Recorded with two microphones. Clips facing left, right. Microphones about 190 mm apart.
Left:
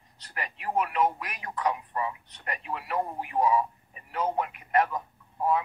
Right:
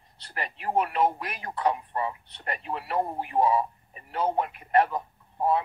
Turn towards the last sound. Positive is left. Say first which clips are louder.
# right 1 dB
turn(degrees=-30)  # may be behind; listen again after turning